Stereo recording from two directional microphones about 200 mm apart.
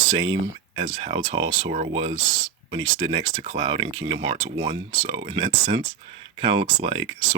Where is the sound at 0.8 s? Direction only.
25° right (ahead or behind).